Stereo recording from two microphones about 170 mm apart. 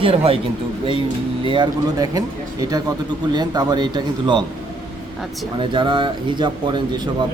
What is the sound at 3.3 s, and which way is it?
Speech, 25° right (ahead or behind).